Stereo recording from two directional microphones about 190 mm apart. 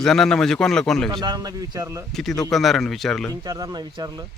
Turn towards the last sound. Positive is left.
turn(degrees=-20)  # may be behind; listen again after turning